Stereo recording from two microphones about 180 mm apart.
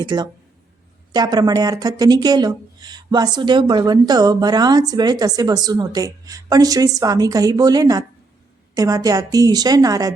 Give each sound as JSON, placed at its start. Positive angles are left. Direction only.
{"t": 0.0, "sound": "speech", "side_deg": -25}